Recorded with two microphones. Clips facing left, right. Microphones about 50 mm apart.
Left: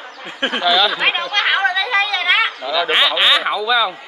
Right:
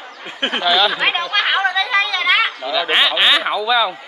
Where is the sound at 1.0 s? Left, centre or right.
Centre.